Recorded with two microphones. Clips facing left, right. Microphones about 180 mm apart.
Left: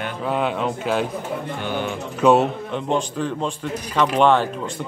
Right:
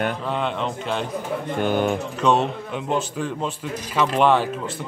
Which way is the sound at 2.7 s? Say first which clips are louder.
Left 2 dB; 5° right (ahead or behind).